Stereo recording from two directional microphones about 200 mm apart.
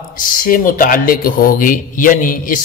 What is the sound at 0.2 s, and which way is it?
Speech, 45° left (ahead or behind).